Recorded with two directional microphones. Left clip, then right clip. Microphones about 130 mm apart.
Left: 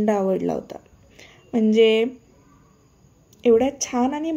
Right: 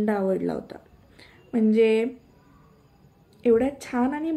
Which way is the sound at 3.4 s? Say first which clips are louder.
Left 4 dB; 30° left (ahead or behind).